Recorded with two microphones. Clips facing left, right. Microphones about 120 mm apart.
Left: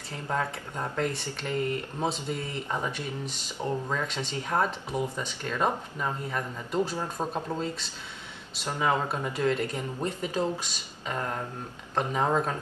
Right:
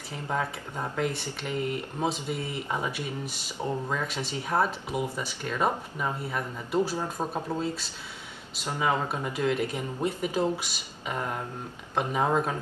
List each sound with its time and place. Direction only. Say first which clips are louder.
0.1 s speech: even; 10° right (ahead or behind)
8.6 s speech: even; 15° right (ahead or behind)